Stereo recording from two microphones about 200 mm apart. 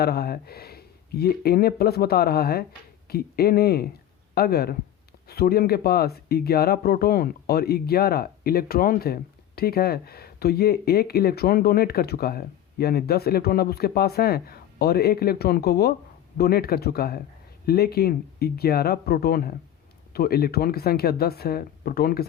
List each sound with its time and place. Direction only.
0.0 s speech: 50° left (ahead or behind)